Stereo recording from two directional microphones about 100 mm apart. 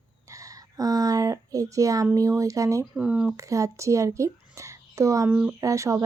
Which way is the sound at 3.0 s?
10° right (ahead or behind).